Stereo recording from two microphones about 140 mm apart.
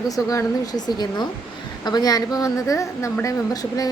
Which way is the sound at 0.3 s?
25° left (ahead or behind).